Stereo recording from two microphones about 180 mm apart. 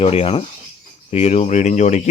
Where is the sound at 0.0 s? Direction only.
35° left (ahead or behind).